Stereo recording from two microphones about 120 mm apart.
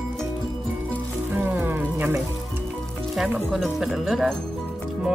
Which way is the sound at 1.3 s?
20° right (ahead or behind).